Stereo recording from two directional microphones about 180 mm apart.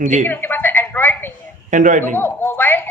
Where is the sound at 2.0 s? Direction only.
10° left (ahead or behind).